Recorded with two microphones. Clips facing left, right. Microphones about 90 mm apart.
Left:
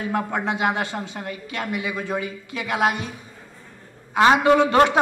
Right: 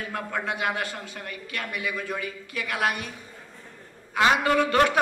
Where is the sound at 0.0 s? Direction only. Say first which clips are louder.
Left 6 dB; 25° left (ahead or behind).